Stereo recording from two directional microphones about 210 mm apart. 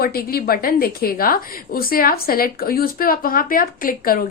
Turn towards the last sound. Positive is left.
turn(degrees=40)  # may be behind; listen again after turning